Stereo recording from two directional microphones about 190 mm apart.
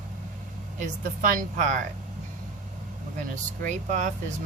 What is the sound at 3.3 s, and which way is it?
Speech, 40° right (ahead or behind).